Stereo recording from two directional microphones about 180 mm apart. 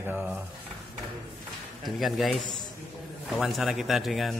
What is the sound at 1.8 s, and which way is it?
A man's voice, centre (ahead or behind).